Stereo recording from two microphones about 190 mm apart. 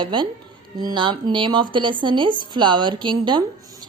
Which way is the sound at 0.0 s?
25° right (ahead or behind).